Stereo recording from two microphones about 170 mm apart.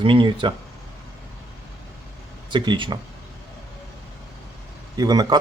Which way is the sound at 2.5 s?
25° right (ahead or behind).